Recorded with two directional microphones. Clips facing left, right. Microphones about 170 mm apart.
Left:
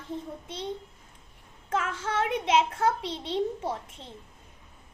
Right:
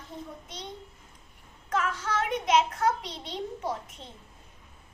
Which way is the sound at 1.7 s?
30° left (ahead or behind).